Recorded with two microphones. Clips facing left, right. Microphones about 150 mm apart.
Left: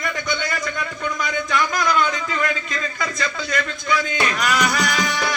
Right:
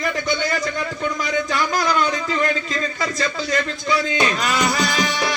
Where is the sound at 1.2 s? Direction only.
30° right (ahead or behind).